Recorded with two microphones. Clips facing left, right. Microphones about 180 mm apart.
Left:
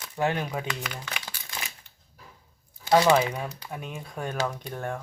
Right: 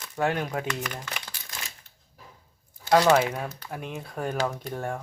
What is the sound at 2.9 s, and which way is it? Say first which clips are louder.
Speech: even; 10° left (ahead or behind).